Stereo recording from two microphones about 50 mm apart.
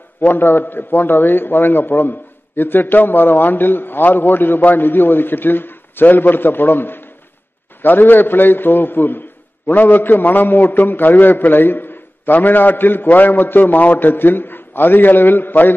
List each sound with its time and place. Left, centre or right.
0.2 s a man's voice: left